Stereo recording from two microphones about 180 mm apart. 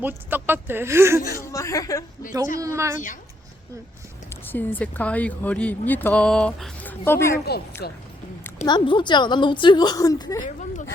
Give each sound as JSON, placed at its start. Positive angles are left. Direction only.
{"t": 0.0, "sound": "speech", "side_deg": -10}
{"t": 1.4, "sound": "speech", "side_deg": 15}
{"t": 2.6, "sound": "speech", "side_deg": -15}
{"t": 4.5, "sound": "speech", "side_deg": 10}
{"t": 7.8, "sound": "speech", "side_deg": 60}
{"t": 8.6, "sound": "a woman's voice", "side_deg": 25}
{"t": 10.4, "sound": "speech", "side_deg": 45}